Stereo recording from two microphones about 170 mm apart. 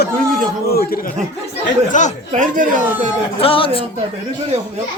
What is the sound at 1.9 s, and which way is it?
Speech, 45° left (ahead or behind).